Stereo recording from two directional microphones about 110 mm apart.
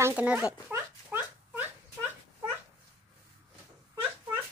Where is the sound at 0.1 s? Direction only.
10° right (ahead or behind).